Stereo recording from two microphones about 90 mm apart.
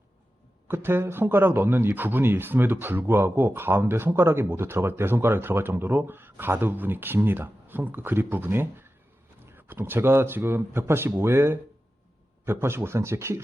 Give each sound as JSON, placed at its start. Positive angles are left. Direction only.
{"t": 0.7, "sound": "speech", "side_deg": -25}